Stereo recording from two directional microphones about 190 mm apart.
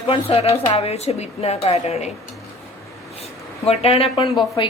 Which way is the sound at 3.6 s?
30° left (ahead or behind).